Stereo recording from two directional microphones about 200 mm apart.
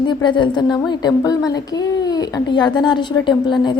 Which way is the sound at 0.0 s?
20° left (ahead or behind).